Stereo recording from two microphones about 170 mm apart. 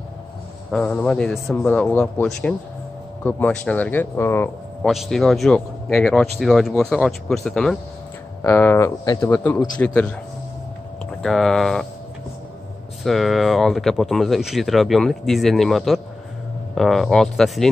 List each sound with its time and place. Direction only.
0.7 s speech: 5° left (ahead or behind)
3.3 s speech: 10° left (ahead or behind)
4.8 s speech: centre (ahead or behind)
11.2 s speech: centre (ahead or behind)
13.0 s speech: centre (ahead or behind)